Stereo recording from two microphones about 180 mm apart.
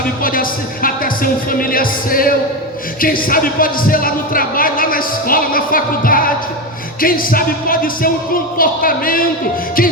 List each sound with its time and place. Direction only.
0.0 s speech: 50° left (ahead or behind)